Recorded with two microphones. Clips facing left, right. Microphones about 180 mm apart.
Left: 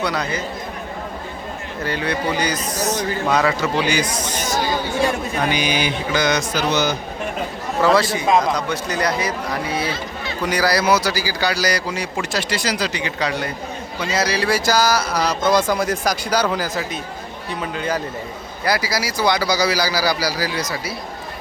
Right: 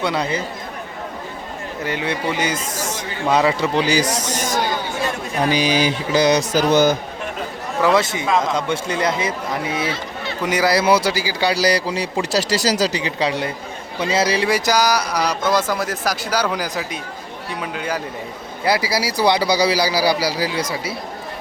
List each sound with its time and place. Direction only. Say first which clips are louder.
0.0 s speech: right 2 dB; 25° right (ahead or behind)
1.8 s a man's voice: left 1 dB; 20° right (ahead or behind)
4.0 s speech: right 2 dB; 80° right
5.4 s speech: right 5 dB; 35° right (ahead or behind); by 6.9 s 50° right (ahead or behind)
7.8 s speech: left 1 dB; 20° right (ahead or behind)
18.6 s speech: right 2 dB; 25° right (ahead or behind)